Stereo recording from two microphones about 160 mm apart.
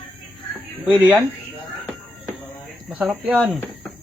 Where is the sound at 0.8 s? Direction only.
10° right (ahead or behind).